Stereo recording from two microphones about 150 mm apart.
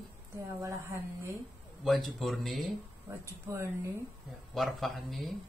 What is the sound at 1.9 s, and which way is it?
Speech, centre (ahead or behind).